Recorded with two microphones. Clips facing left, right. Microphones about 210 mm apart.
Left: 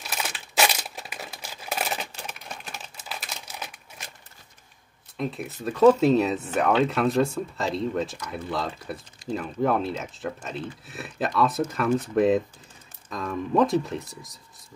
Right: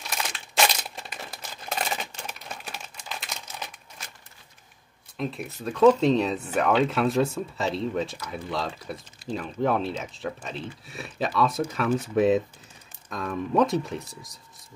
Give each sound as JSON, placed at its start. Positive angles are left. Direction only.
{"t": 0.0, "sound": "crumpling", "side_deg": 5}
{"t": 5.1, "sound": "speech", "side_deg": 0}